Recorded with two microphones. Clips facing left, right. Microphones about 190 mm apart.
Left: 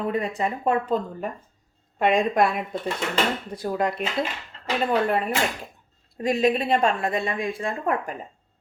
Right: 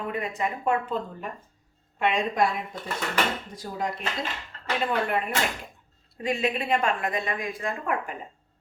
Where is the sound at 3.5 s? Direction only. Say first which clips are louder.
Left 6 dB; 65° left (ahead or behind).